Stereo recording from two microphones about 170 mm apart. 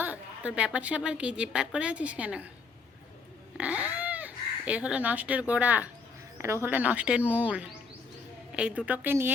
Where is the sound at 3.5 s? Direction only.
10° right (ahead or behind).